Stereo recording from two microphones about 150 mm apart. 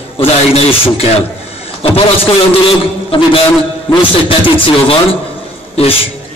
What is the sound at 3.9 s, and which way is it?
A man's voice, 35° left (ahead or behind).